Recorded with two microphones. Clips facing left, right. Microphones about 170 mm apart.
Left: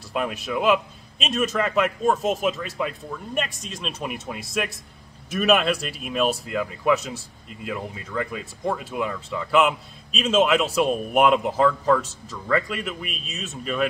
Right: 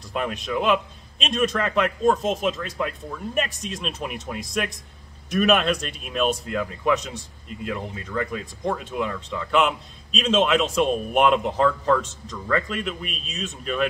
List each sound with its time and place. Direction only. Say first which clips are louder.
0.1 s speech: even; 5° left (ahead or behind)